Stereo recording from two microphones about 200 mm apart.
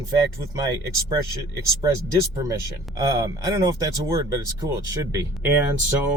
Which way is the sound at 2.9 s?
20° right (ahead or behind).